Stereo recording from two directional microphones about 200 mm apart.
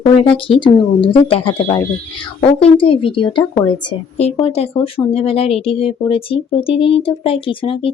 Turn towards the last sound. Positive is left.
turn(degrees=25)  # may be behind; listen again after turning